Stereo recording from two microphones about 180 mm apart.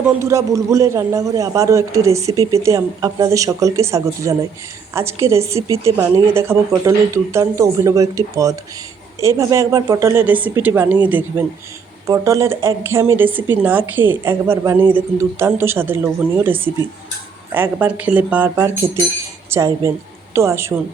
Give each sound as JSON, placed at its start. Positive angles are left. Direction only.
{"t": 0.2, "sound": "speech", "side_deg": -15}